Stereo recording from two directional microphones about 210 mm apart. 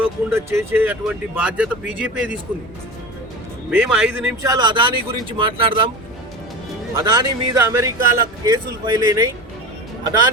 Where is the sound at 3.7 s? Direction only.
5° right (ahead or behind); by 5.8 s 25° right (ahead or behind).